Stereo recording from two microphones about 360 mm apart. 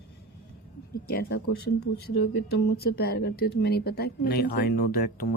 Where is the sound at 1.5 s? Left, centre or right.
Left.